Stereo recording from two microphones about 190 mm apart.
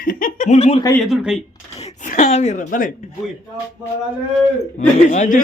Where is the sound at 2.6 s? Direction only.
45° left (ahead or behind).